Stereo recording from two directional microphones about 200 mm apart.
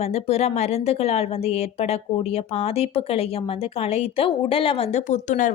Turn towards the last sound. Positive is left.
turn(degrees=40)  # may be behind; listen again after turning